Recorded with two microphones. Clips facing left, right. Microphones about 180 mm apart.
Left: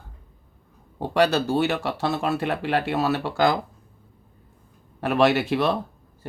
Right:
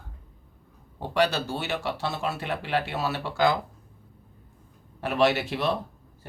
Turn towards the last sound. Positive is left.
turn(degrees=60)  # may be behind; listen again after turning